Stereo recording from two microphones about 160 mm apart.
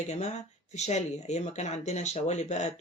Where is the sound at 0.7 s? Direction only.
45° left (ahead or behind).